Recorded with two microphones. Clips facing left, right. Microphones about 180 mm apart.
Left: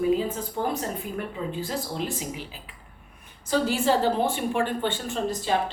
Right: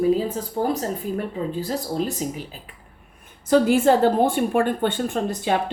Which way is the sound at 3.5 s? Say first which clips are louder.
Right 7 dB; 55° right (ahead or behind).